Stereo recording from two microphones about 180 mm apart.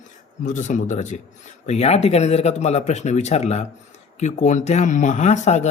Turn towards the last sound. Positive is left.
turn(degrees=40)  # may be behind; listen again after turning